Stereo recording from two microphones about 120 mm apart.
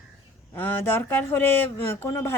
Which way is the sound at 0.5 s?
15° left (ahead or behind).